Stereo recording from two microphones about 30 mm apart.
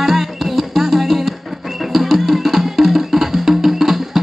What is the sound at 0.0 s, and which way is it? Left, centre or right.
Music, centre.